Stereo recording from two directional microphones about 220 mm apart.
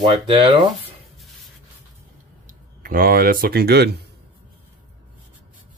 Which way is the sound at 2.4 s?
40° right (ahead or behind).